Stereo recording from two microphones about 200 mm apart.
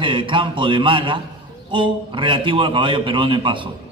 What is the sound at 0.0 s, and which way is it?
Mantra, 25° right (ahead or behind).